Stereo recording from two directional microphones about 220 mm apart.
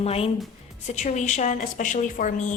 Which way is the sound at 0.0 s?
25° left (ahead or behind).